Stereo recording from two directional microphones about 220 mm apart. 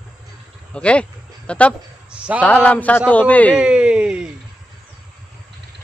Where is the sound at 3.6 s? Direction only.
5° right (ahead or behind).